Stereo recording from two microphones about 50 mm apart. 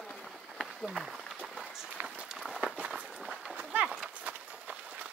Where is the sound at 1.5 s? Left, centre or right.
Centre.